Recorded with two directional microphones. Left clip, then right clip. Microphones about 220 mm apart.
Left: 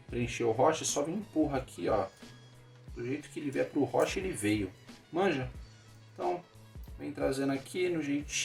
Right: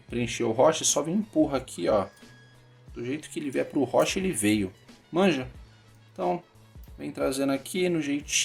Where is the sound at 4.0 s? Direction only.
45° right (ahead or behind).